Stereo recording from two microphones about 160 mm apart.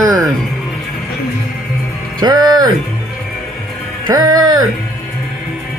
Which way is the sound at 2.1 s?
25° right (ahead or behind).